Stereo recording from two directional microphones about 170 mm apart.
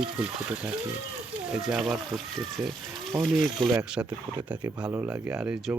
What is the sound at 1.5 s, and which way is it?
Speech, 5° right (ahead or behind).